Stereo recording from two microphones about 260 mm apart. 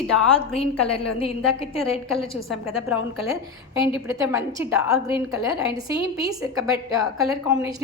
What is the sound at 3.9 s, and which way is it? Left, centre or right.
A woman's voice, centre.